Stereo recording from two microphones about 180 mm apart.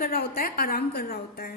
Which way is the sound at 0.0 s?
55° left (ahead or behind).